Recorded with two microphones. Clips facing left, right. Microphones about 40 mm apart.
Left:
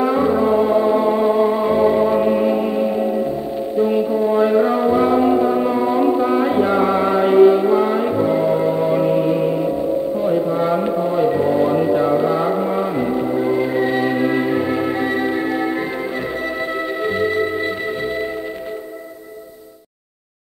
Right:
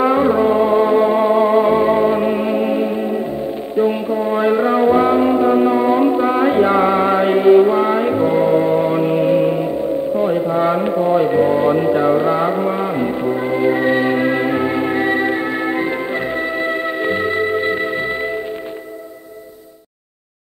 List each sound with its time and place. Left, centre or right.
0.0 s music: right